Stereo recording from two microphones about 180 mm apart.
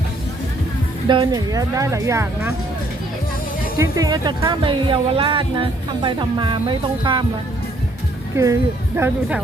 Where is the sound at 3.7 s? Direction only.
20° right (ahead or behind).